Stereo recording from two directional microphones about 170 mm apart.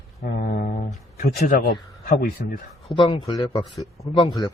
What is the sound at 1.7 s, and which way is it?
Speech, 65° left (ahead or behind).